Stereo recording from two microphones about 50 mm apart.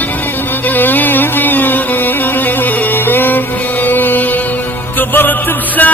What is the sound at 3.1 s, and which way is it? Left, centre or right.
Music, left.